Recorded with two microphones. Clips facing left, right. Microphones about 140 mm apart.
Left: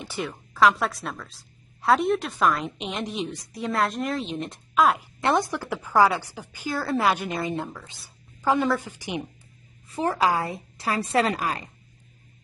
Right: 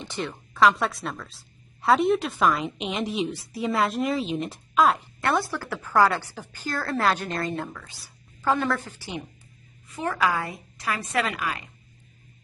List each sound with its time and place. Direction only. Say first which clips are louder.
0.0 s speech: even; 5° left (ahead or behind)
5.2 s a woman's voice: left 2 dB; 20° left (ahead or behind)
9.8 s a woman's voice: left 2 dB; 30° left (ahead or behind)